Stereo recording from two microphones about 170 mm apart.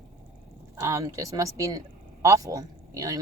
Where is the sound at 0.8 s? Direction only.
20° right (ahead or behind).